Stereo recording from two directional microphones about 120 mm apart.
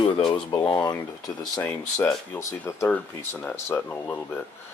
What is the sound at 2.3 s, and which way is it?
Speech, 15° left (ahead or behind).